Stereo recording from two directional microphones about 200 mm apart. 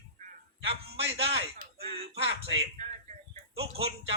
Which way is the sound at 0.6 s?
30° right (ahead or behind).